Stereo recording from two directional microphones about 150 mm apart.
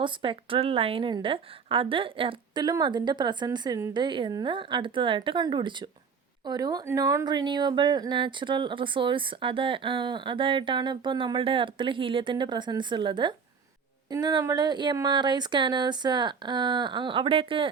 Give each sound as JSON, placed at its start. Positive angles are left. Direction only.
{"t": 0.0, "sound": "a woman's voice", "side_deg": -35}